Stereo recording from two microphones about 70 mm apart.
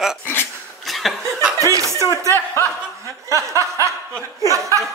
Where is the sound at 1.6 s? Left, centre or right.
Right.